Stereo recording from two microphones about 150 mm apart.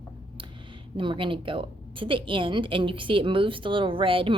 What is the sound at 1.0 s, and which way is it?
A woman's voice, 35° right (ahead or behind).